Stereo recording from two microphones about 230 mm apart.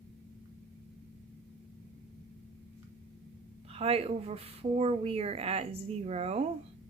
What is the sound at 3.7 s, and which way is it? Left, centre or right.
Speech, right.